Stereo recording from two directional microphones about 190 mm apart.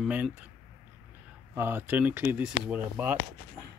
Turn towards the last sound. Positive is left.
turn(degrees=-10)  # may be behind; listen again after turning